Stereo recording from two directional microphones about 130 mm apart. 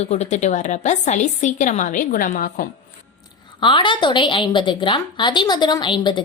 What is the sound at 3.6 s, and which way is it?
A woman's voice, 40° left (ahead or behind).